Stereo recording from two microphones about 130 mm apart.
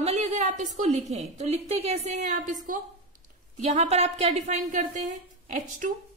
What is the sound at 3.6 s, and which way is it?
A woman's voice, 60° right (ahead or behind).